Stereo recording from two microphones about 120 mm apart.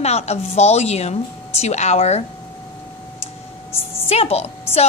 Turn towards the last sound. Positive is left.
turn(degrees=60)  # may be behind; listen again after turning